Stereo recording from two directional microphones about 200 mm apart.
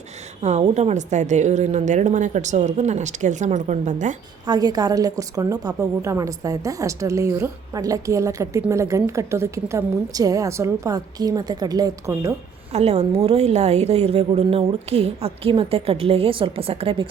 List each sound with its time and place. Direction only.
0.4 s a woman's voice: 35° right (ahead or behind)
4.4 s a woman's voice: 20° right (ahead or behind)
12.7 s a woman's voice: 30° right (ahead or behind)